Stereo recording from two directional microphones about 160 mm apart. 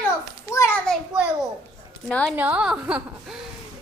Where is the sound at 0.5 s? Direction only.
15° left (ahead or behind).